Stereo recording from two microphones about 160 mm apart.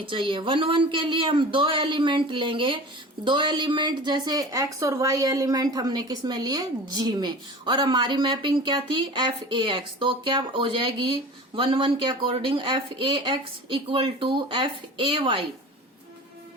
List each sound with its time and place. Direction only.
0.0 s speech: 30° right (ahead or behind)